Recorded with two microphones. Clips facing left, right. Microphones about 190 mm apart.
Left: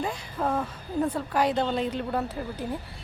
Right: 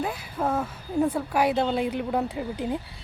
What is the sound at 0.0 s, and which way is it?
A woman's voice, 5° right (ahead or behind).